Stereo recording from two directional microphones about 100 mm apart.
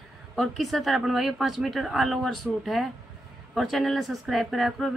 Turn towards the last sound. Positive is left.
turn(degrees=0)  # may be behind; listen again after turning